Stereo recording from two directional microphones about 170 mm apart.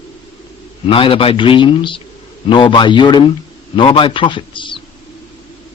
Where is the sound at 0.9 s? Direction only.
30° left (ahead or behind).